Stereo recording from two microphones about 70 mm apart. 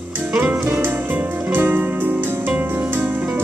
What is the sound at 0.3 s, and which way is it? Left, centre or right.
Music, right.